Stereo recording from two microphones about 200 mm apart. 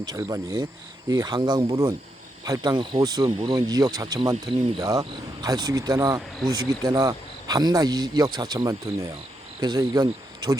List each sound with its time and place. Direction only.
0.0 s speech: 20° right (ahead or behind)
3.2 s speech: 30° right (ahead or behind)